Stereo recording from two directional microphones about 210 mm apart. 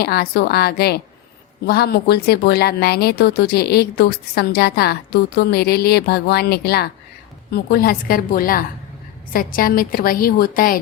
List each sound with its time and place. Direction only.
0.0 s speech: 50° left (ahead or behind)